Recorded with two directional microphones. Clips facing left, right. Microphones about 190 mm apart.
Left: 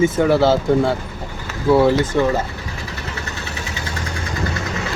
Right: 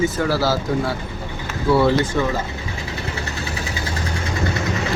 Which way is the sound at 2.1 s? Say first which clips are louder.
Left 4 dB; 15° left (ahead or behind).